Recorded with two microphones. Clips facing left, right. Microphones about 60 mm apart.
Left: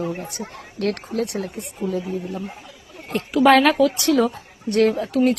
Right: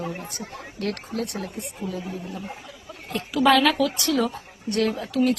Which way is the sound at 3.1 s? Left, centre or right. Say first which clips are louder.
Left 4 dB; left.